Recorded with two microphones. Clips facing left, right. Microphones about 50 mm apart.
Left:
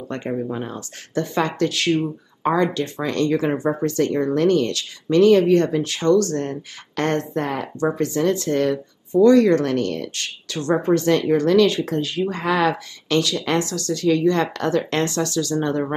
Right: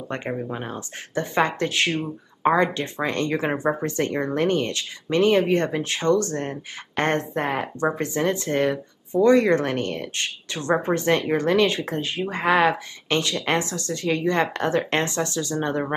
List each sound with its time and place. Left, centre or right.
0.1 s speech: right